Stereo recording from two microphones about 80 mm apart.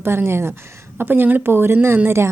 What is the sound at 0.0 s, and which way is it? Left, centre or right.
A woman's voice, right.